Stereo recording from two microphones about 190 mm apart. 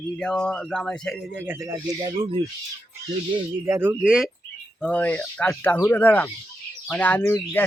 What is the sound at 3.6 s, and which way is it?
Speech, 10° right (ahead or behind).